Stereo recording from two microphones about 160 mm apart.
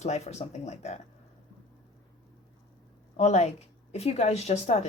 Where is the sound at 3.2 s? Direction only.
45° left (ahead or behind).